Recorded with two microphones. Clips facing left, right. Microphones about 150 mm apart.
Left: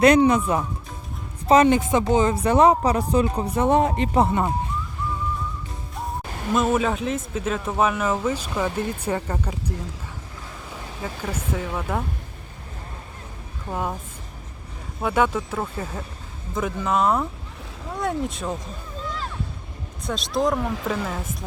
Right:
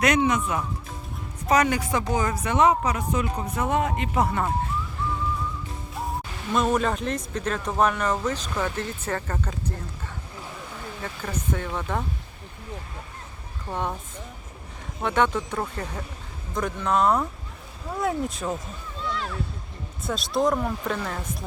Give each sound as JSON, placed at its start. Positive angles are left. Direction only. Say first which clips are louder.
{"t": 0.0, "sound": "speech", "louder": "left 6 dB", "side_deg": 30}
{"t": 4.3, "sound": "speech", "louder": "left 3 dB", "side_deg": 20}
{"t": 6.5, "sound": "speech", "louder": "left 2 dB", "side_deg": 5}
{"t": 11.0, "sound": "speech", "louder": "left 2 dB", "side_deg": 10}
{"t": 13.7, "sound": "speech", "louder": "left 1 dB", "side_deg": 5}
{"t": 15.0, "sound": "speech", "louder": "left 2 dB", "side_deg": 5}
{"t": 19.0, "sound": "music", "louder": "right 2 dB", "side_deg": 40}
{"t": 20.1, "sound": "speech", "louder": "left 1 dB", "side_deg": 0}